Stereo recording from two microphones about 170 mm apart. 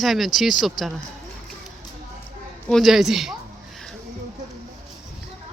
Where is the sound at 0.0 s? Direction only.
Centre (ahead or behind).